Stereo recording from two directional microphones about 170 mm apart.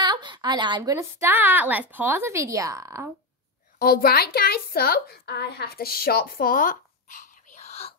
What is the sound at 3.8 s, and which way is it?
A woman's voice, 60° left (ahead or behind).